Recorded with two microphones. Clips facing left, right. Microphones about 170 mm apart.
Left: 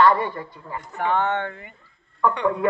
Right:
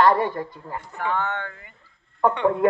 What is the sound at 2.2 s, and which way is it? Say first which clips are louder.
Speech: right 2 dB; 30° right (ahead or behind).